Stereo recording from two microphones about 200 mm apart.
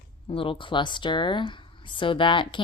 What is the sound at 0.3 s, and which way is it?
Speech, 25° left (ahead or behind).